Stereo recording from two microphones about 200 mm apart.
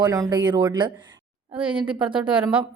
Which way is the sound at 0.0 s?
20° right (ahead or behind).